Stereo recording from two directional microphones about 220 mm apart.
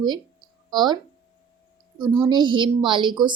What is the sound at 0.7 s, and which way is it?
Speech, 20° right (ahead or behind).